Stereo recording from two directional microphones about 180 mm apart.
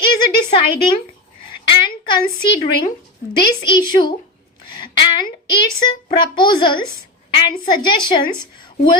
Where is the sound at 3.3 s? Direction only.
25° left (ahead or behind).